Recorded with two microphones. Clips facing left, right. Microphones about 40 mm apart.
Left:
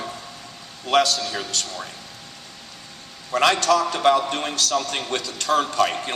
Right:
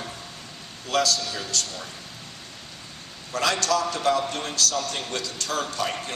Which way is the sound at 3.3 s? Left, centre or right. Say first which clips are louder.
Left 6 dB; left.